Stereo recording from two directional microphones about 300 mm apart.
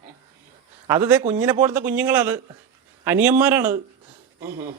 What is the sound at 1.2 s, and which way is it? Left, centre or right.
Speech, right.